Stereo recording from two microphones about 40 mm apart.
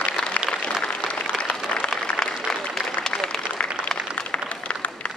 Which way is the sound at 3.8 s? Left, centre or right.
Left.